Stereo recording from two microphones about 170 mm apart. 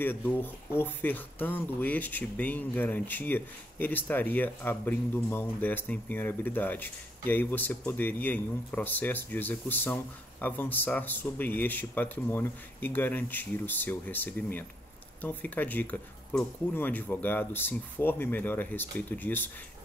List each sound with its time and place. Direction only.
0.0 s speech: 10° left (ahead or behind)